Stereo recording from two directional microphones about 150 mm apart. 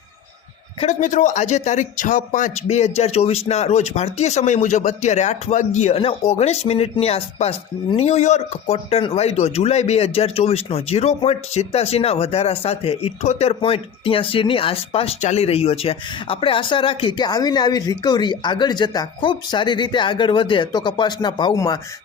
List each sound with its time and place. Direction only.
0.8 s speech: 55° left (ahead or behind); by 21.8 s 25° left (ahead or behind)